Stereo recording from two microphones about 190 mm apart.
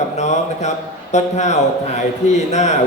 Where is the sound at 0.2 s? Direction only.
35° left (ahead or behind).